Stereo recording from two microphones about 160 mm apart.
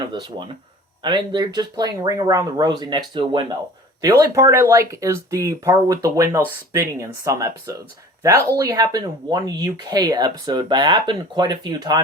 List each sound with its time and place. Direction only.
0.1 s speech: 30° right (ahead or behind)
4.0 s speech: 20° right (ahead or behind)